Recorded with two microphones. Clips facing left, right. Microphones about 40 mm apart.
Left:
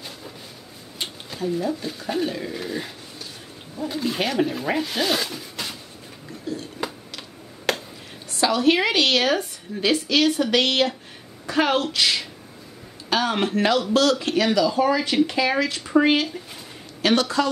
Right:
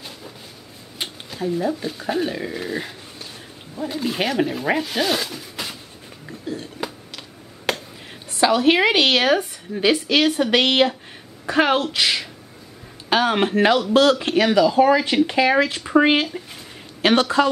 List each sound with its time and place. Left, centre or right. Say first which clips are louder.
1.4 s speech: right 2 dB; centre
3.9 s speech: right 2 dB; centre
6.8 s a sound: even; centre
8.4 s a woman's voice: right 3 dB; right